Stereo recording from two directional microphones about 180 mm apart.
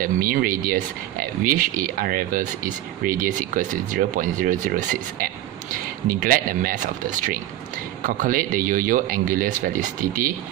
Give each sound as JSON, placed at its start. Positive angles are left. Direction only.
{"t": 0.0, "sound": "speech", "side_deg": -50}
{"t": 6.1, "sound": "speech", "side_deg": -50}
{"t": 8.0, "sound": "speech", "side_deg": -50}